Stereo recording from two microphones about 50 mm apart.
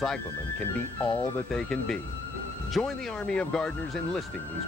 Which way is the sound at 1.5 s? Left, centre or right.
Centre.